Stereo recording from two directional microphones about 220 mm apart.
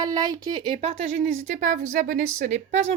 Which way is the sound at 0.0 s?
15° right (ahead or behind).